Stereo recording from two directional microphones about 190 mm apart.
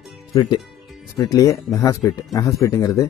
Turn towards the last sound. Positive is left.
turn(degrees=15)  # may be behind; listen again after turning